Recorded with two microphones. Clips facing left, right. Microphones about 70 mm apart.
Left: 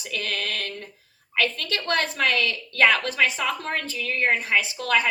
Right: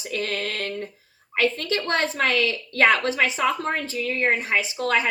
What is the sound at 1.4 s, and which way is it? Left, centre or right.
Speech, right.